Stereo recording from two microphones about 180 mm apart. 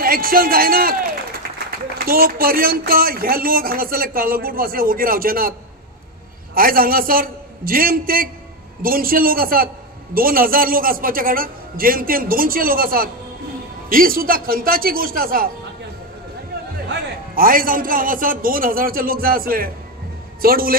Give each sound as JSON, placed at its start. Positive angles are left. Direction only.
{"t": 0.0, "sound": "speech", "side_deg": -55}
{"t": 2.0, "sound": "speech", "side_deg": -55}
{"t": 6.5, "sound": "a man's voice", "side_deg": -55}
{"t": 17.4, "sound": "a man's voice", "side_deg": -50}